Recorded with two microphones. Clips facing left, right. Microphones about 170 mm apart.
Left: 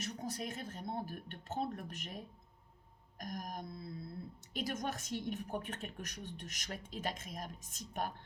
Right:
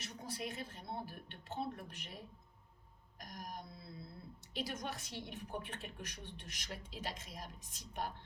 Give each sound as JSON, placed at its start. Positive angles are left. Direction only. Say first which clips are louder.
{"t": 0.0, "sound": "a woman's voice", "louder": "left 3 dB", "side_deg": 45}